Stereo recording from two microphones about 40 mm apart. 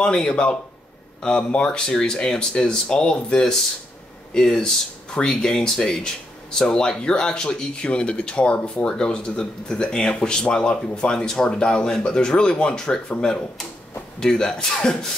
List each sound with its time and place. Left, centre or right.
0.0 s speech: centre
4.6 s speech: left